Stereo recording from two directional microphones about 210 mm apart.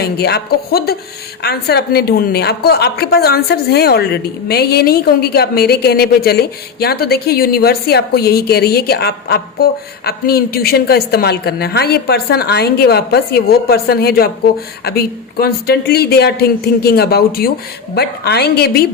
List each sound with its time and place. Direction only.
0.0 s a woman's voice: 50° left (ahead or behind)